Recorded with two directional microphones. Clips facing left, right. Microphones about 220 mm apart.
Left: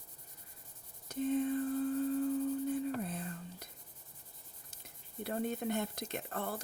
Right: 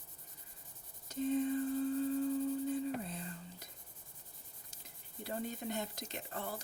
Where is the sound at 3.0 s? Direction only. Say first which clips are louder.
Left 4 dB; 55° left (ahead or behind).